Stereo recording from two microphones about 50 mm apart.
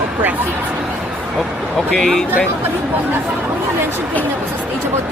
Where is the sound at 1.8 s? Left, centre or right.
Centre.